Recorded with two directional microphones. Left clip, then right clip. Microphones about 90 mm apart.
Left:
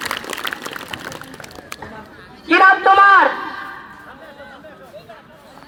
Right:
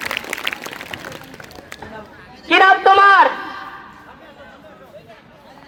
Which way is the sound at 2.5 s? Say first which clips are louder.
Even; 60° right (ahead or behind).